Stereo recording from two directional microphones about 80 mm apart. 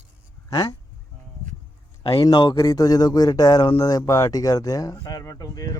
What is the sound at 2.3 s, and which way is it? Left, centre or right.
Speech, left.